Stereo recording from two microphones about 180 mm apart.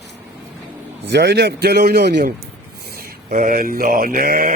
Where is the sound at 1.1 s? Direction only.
70° right (ahead or behind).